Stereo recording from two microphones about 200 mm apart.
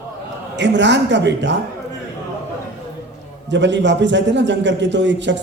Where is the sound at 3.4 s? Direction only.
60° right (ahead or behind).